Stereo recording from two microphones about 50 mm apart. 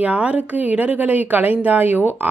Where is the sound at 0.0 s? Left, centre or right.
Right.